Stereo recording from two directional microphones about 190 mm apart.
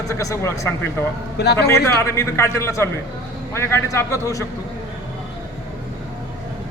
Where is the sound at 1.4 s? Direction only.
60° left (ahead or behind).